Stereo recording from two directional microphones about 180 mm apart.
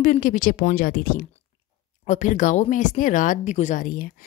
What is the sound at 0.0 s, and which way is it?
Speech, 45° left (ahead or behind).